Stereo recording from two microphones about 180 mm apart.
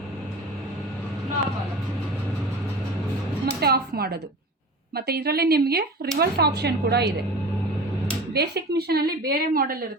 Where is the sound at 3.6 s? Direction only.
60° right (ahead or behind).